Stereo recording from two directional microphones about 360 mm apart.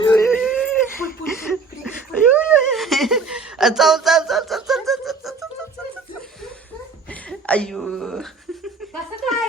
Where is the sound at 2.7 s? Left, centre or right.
Centre.